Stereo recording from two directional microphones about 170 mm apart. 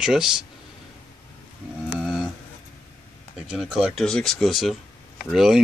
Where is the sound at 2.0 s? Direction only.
Centre (ahead or behind).